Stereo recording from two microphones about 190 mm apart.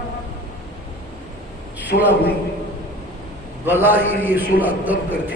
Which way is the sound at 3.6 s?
10° right (ahead or behind).